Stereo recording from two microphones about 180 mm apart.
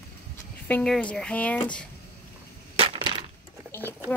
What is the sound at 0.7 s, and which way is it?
Speech, 5° left (ahead or behind).